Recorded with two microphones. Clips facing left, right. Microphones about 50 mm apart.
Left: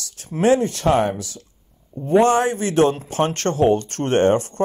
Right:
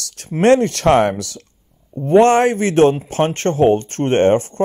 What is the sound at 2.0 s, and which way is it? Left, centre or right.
Speech, right.